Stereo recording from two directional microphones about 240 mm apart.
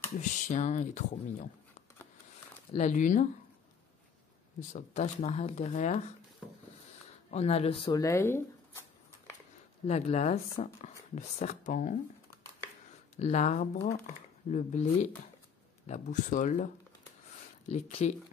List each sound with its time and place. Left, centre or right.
0.2 s speech: left
2.7 s speech: left
4.6 s speech: left
7.2 s speech: left; by 8.8 s centre
9.8 s speech: left
13.1 s speech: left